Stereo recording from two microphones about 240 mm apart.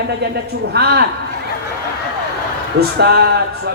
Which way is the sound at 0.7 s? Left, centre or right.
Right.